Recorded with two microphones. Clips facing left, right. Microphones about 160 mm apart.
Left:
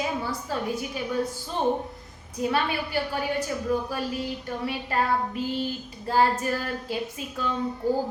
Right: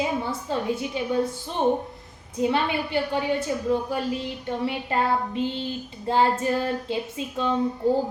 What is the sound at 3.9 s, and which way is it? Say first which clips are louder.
Child singing: right 2 dB; 25° right (ahead or behind).